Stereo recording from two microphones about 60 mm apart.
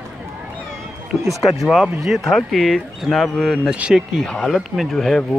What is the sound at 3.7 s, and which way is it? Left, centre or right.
Speech, centre.